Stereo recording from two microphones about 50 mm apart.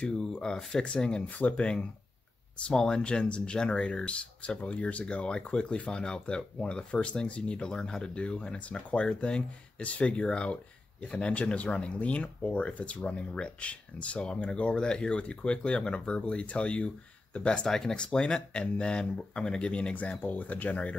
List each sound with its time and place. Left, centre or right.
0.0 s speech: centre
17.6 s speech: centre
20.2 s speech: left